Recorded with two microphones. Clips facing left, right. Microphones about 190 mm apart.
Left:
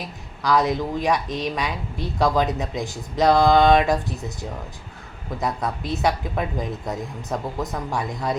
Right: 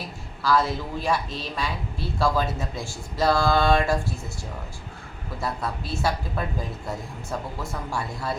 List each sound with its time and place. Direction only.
0.4 s speech: 15° left (ahead or behind)
5.6 s a woman's voice: 20° left (ahead or behind)